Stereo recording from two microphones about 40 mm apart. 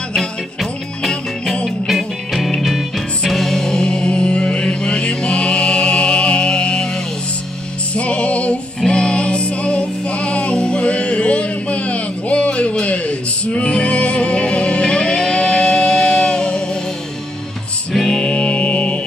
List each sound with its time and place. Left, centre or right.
0.6 s music: centre; by 6.9 s left
7.9 s music: left
17.9 s music: centre
18.2 s music: left